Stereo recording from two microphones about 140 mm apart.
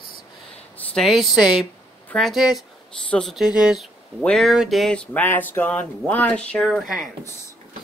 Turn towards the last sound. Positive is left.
turn(degrees=0)  # may be behind; listen again after turning